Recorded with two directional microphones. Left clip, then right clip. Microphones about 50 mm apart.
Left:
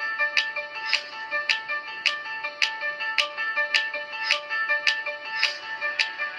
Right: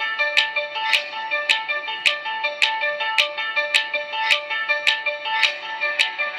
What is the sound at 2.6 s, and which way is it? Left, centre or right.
Music, right.